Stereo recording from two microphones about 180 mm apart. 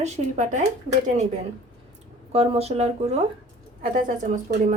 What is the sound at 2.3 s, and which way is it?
A woman's voice, 35° right (ahead or behind).